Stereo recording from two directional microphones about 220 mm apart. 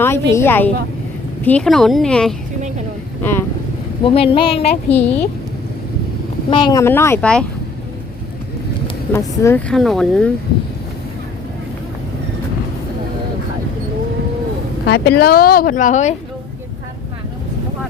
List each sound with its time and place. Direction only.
0.0 s speech: 10° left (ahead or behind)
4.0 s speech: 25° left (ahead or behind)
4.9 s speech: 5° left (ahead or behind)
6.5 s speech: 20° left (ahead or behind); by 7.4 s 5° left (ahead or behind)
9.1 s speech: 10° left (ahead or behind)
14.8 s speech: 45° left (ahead or behind)